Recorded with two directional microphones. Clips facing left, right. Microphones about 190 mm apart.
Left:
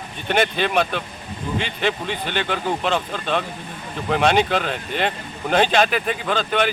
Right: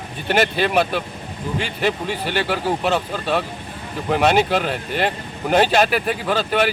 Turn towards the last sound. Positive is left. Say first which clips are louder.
# right 2 dB
turn(degrees=-5)  # may be behind; listen again after turning